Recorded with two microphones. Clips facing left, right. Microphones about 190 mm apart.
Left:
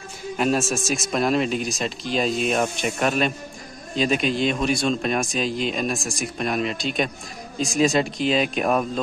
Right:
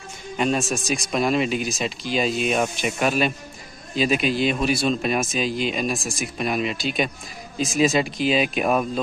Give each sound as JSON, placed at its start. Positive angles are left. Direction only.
{"t": 0.4, "sound": "speech", "side_deg": 0}